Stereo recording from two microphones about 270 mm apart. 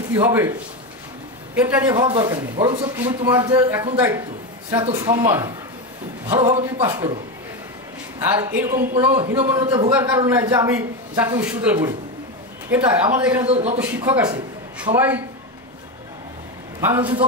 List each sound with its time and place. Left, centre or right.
0.1 s a man's voice: centre
1.9 s a man's voice: centre
8.2 s a man's voice: centre
13.5 s a man's voice: right
13.7 s a man's voice: centre
16.8 s a man's voice: centre